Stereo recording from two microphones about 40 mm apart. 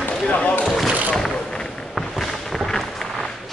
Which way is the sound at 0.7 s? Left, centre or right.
Centre.